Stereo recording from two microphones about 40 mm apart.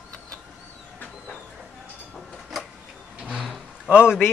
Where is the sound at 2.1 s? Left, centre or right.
Centre.